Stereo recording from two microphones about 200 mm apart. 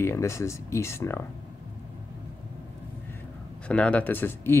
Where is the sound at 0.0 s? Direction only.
15° left (ahead or behind).